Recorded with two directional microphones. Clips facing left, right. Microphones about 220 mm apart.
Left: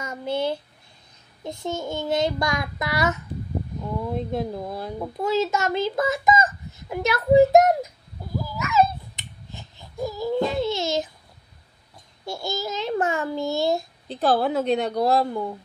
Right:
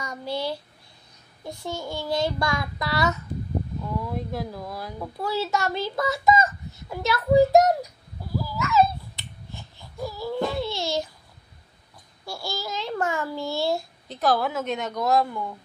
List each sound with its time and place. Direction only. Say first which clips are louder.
0.2 s child singing: left 4 dB; 20° left (ahead or behind)
4.9 s a child's voice: left 5 dB; 20° left (ahead or behind)
8.4 s a sound: even; 20° left (ahead or behind)
12.3 s child singing: left 4 dB; 20° left (ahead or behind)
14.0 s speech: left 2 dB; 30° left (ahead or behind)